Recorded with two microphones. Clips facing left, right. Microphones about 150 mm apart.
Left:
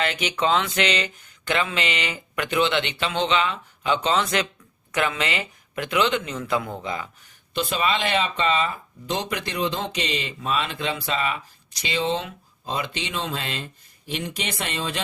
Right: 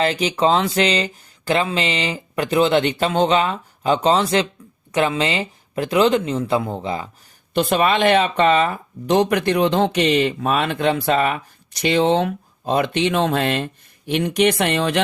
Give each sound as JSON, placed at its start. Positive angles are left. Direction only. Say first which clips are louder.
{"t": 0.0, "sound": "speech", "louder": "right 6 dB", "side_deg": -35}
{"t": 7.5, "sound": "speech", "louder": "right 7 dB", "side_deg": -55}